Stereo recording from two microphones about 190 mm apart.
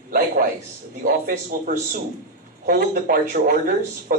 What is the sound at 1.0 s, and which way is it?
A man's voice, 45° right (ahead or behind).